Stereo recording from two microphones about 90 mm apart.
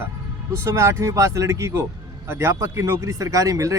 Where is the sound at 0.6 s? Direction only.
35° right (ahead or behind).